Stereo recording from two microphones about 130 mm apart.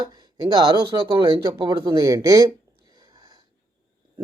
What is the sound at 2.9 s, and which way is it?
Wheeze, 30° right (ahead or behind).